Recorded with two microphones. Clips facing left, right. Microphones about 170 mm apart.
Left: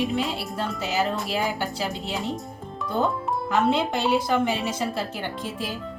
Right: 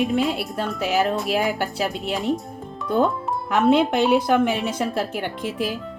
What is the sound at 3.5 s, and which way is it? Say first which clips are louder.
A woman's voice: right 5 dB; 60° right (ahead or behind).